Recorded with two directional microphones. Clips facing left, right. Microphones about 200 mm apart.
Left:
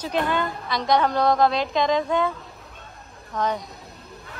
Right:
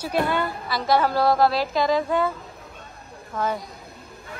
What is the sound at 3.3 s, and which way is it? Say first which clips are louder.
Speech: left 1 dB; 5° right (ahead or behind).